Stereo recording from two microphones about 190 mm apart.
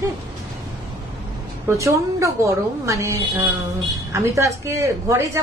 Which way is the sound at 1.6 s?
15° right (ahead or behind).